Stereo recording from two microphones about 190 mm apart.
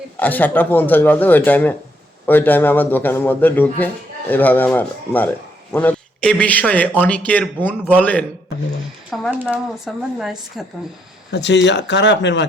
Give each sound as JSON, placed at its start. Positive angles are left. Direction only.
{"t": 0.2, "sound": "a man's voice", "side_deg": 10}
{"t": 11.3, "sound": "speech", "side_deg": 65}